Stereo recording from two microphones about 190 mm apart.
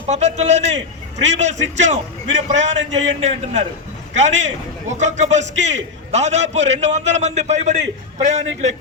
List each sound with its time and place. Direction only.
0.1 s a man's voice: 35° right (ahead or behind)